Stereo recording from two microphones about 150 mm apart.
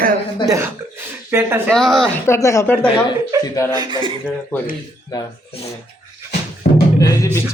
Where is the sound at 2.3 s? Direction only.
20° left (ahead or behind).